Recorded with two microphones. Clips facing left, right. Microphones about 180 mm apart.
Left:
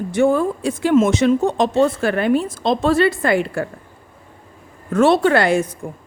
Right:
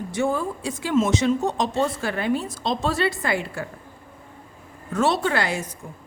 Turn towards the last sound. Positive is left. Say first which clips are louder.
# left 9 dB
turn(degrees=55)  # may be behind; listen again after turning